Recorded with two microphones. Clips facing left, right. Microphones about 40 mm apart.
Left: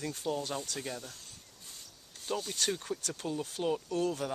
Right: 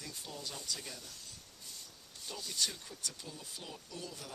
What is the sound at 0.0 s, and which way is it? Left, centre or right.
Speech, left.